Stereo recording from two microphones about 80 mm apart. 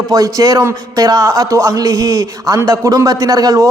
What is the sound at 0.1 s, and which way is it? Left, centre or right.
A man's voice, right.